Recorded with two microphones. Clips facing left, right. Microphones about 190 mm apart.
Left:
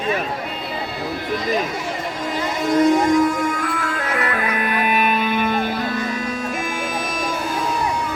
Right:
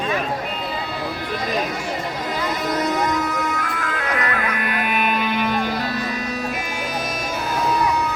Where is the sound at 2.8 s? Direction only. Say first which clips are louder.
Left 9 dB; 50° left (ahead or behind).